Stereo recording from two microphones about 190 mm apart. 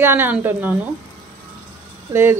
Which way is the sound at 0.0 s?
10° right (ahead or behind).